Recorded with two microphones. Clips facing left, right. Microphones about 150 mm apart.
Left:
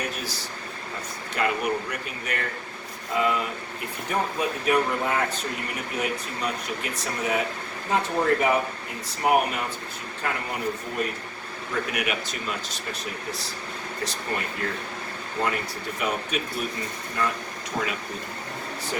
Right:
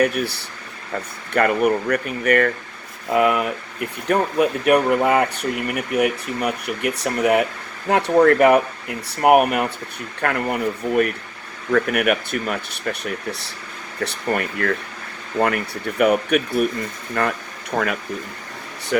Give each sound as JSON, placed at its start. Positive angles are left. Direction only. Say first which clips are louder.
{"t": 0.0, "sound": "speech", "louder": "right 12 dB", "side_deg": -60}